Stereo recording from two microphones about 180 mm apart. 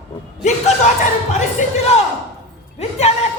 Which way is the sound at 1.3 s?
40° left (ahead or behind).